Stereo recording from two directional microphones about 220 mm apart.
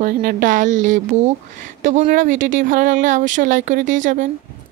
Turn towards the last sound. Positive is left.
turn(degrees=-35)  # may be behind; listen again after turning